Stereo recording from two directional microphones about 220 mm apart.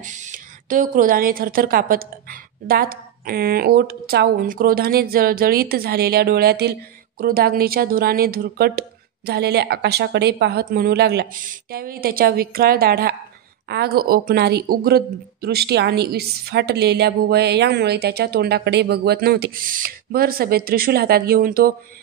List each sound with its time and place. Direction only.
0.0 s a woman's voice: 35° right (ahead or behind)